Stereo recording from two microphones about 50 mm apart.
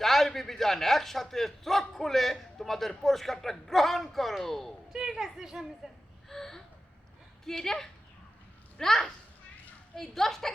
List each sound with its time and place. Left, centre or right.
0.0 s a man's voice: centre
4.9 s a woman's voice: centre
6.2 s gasp: centre
7.4 s a woman's voice: centre